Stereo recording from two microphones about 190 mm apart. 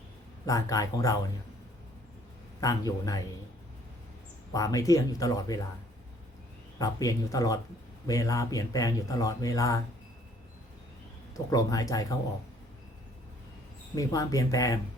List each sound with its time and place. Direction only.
0.4 s speech: 20° left (ahead or behind)
2.6 s speech: 20° left (ahead or behind)
4.5 s speech: 20° left (ahead or behind)
6.7 s speech: 20° left (ahead or behind)
11.5 s speech: 20° left (ahead or behind)
13.9 s speech: 15° left (ahead or behind)